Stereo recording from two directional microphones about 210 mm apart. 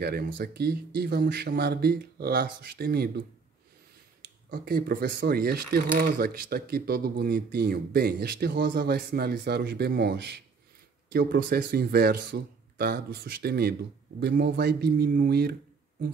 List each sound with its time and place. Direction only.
0.4 s speech: 50° right (ahead or behind)
4.2 s speech: 45° right (ahead or behind)